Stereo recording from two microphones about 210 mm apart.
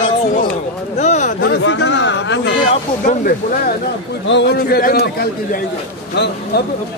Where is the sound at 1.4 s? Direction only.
60° left (ahead or behind).